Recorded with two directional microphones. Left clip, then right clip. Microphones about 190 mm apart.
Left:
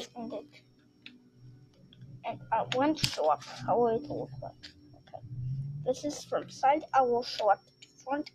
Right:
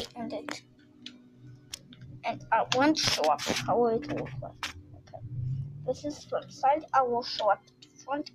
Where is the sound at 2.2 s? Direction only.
5° left (ahead or behind).